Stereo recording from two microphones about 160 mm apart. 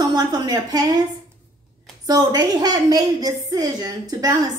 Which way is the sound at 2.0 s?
25° right (ahead or behind).